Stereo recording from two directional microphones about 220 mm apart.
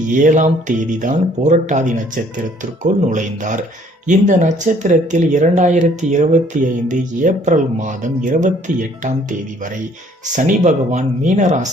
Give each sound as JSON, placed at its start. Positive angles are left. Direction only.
{"t": 0.1, "sound": "speech", "side_deg": -35}
{"t": 10.3, "sound": "speech", "side_deg": -35}